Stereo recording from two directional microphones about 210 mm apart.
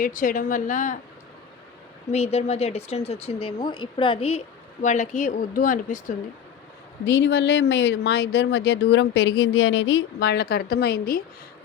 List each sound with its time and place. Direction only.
0.0 s a woman's voice: 40° left (ahead or behind)
2.1 s speech: 30° left (ahead or behind)
7.0 s speech: 60° left (ahead or behind)